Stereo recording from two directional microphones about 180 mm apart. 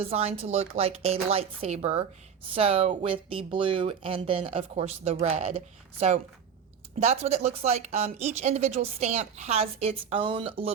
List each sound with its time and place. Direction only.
0.0 s speech: 35° right (ahead or behind)